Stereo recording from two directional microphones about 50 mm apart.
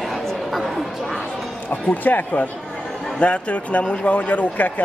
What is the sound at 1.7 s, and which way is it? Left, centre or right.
Speech, left.